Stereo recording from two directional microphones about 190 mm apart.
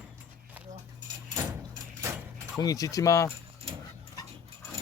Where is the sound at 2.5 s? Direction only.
20° left (ahead or behind).